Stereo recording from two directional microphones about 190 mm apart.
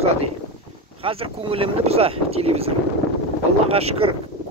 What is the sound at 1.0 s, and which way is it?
Speech, 30° right (ahead or behind).